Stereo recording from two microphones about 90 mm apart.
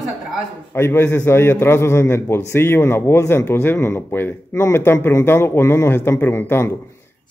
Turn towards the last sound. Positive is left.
turn(degrees=25)  # may be behind; listen again after turning